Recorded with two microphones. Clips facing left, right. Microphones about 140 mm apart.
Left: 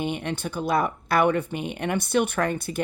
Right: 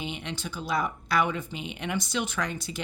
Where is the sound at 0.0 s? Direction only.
55° left (ahead or behind).